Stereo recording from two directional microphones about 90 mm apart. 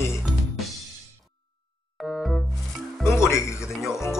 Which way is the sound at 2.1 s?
5° left (ahead or behind).